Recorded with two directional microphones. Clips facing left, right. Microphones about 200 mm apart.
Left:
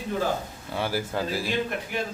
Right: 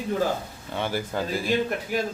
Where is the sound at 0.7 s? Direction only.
5° left (ahead or behind).